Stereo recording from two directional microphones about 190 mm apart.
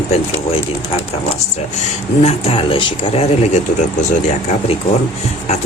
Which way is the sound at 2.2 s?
30° left (ahead or behind).